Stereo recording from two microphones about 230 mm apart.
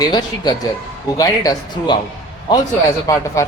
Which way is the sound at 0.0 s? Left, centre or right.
Centre.